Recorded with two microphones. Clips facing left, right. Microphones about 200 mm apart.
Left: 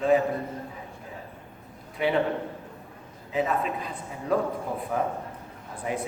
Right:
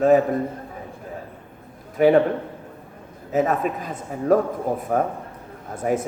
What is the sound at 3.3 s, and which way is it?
A man's voice, 45° right (ahead or behind).